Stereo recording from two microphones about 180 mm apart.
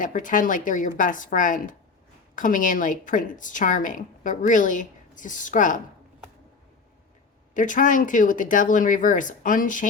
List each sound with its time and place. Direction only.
0.0 s a woman's voice: 45° left (ahead or behind)
7.5 s a woman's voice: 45° left (ahead or behind)